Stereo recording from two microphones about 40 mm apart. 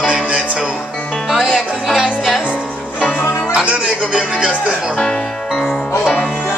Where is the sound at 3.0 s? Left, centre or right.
Left.